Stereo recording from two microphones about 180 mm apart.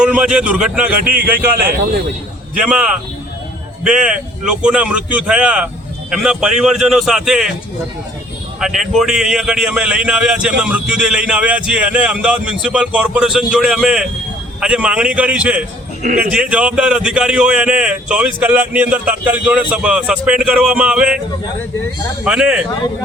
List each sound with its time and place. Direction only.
0.0 s a man's voice: 5° right (ahead or behind)
0.9 s speech: 50° right (ahead or behind)
2.6 s a man's voice: 5° right (ahead or behind)
8.6 s a man's voice: centre (ahead or behind)
22.2 s a man's voice: 5° right (ahead or behind)